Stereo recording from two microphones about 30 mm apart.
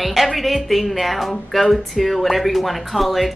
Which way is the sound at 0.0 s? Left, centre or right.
Centre.